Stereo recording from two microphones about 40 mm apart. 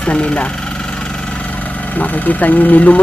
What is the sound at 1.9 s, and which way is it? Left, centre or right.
Speech, left.